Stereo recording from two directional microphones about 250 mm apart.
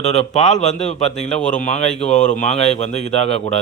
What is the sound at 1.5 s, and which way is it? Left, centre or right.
Speech, left.